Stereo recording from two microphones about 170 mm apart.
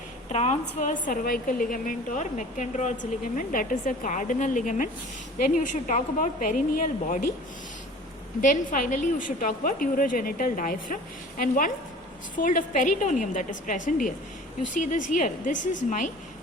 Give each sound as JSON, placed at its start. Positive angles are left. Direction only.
{"t": 0.3, "sound": "a woman's voice", "side_deg": 45}
{"t": 8.4, "sound": "a woman's voice", "side_deg": 50}